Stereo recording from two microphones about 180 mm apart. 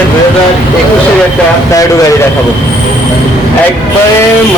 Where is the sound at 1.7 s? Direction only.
20° left (ahead or behind).